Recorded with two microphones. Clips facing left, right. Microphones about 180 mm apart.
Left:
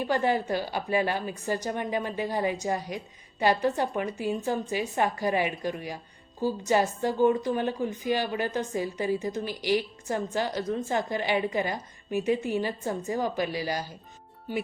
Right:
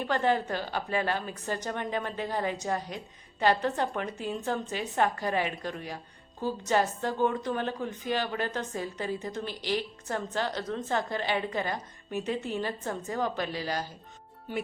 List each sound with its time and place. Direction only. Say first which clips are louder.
0.0 s a woman's voice: left 1 dB; 10° left (ahead or behind)